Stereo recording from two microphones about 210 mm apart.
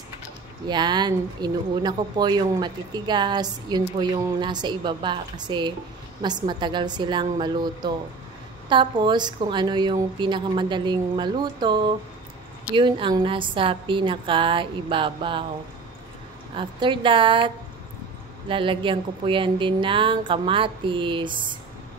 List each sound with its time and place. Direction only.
0.7 s speech: 20° right (ahead or behind)
16.5 s speech: 25° right (ahead or behind)
18.5 s speech: 25° right (ahead or behind)